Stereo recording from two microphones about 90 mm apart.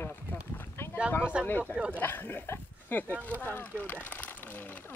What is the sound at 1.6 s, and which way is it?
Speech, 15° right (ahead or behind).